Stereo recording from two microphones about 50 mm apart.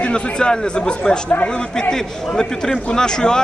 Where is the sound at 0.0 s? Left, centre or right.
Centre.